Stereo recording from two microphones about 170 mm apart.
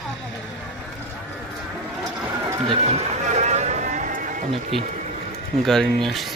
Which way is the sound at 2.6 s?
40° right (ahead or behind).